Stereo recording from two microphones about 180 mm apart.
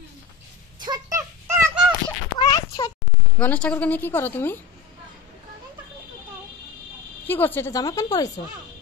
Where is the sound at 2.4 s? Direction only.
20° left (ahead or behind).